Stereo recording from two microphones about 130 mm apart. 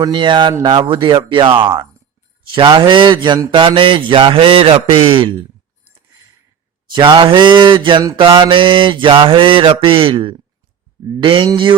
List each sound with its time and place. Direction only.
0.0 s mantra: 40° right (ahead or behind)
6.9 s mantra: 35° right (ahead or behind)